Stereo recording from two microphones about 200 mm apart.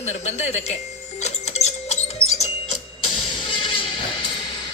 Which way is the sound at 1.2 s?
35° left (ahead or behind).